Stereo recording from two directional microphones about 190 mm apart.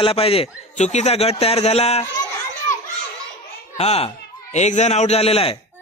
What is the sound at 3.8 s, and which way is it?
Speech, 30° left (ahead or behind).